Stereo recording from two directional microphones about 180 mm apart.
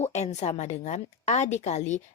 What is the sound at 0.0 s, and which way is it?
A woman's voice, 40° left (ahead or behind).